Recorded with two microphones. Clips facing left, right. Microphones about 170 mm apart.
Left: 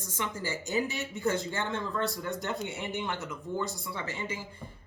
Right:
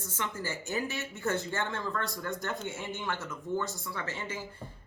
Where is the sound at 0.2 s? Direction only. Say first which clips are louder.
Left 2 dB; 15° left (ahead or behind).